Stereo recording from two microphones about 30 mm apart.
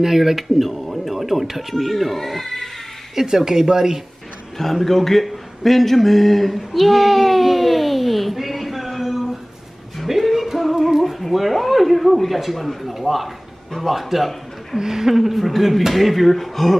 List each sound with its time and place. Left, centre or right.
0.0 s speech: centre
3.2 s speech: centre
4.8 s speech: centre
6.5 s a sound: centre
10.0 s music: centre
11.0 s a sound: centre
11.2 s speech: centre
14.8 s speech: centre